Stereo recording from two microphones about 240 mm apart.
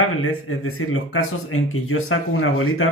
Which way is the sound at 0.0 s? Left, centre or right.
Left.